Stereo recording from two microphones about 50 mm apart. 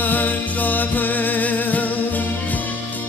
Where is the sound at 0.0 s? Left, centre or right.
Left.